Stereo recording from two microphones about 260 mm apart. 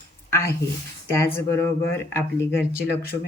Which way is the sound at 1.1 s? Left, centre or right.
Centre.